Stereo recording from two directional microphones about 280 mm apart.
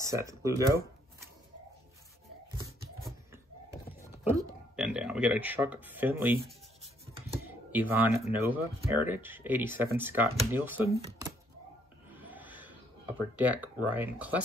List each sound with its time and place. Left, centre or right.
0.0 s speech: centre
4.2 s speech: centre
7.7 s speech: centre
11.0 s speech: right
12.2 s a sound: centre